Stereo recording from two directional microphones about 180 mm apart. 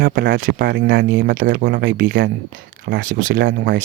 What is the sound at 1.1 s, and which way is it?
Speech, 90° right.